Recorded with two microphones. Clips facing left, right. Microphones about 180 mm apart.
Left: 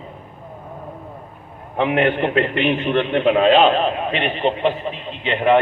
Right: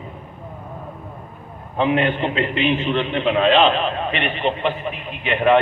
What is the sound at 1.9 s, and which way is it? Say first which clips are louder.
A man's voice: left 3 dB; 65° left (ahead or behind).